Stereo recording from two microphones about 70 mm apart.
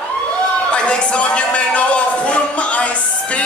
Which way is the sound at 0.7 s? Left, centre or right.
Centre.